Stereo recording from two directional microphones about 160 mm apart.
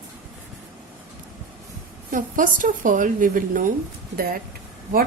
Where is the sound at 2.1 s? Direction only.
55° right (ahead or behind).